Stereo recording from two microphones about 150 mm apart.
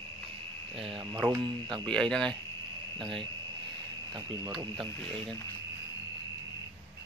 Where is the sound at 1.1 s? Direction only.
20° right (ahead or behind).